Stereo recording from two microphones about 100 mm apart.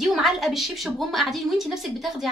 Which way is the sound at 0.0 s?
5° right (ahead or behind).